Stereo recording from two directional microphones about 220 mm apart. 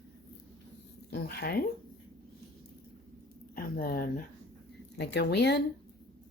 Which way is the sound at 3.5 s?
40° left (ahead or behind).